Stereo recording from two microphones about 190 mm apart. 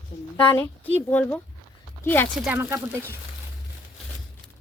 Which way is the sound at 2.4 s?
10° right (ahead or behind).